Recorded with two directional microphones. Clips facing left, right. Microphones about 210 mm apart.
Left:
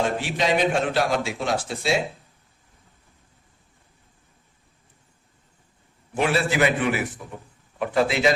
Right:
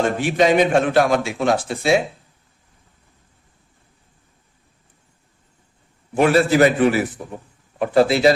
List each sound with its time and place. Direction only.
0.0 s a man's voice: 50° right (ahead or behind)
6.1 s a man's voice: 45° right (ahead or behind)